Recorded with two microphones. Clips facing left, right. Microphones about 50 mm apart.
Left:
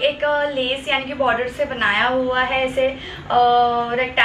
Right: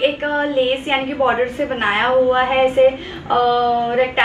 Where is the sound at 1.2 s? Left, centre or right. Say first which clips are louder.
Right 2 dB; right.